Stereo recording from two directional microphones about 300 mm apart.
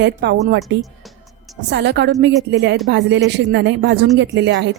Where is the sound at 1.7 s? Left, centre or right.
Right.